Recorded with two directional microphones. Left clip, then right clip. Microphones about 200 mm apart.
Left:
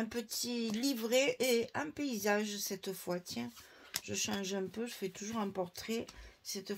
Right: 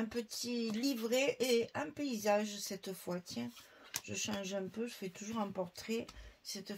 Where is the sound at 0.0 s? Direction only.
40° left (ahead or behind).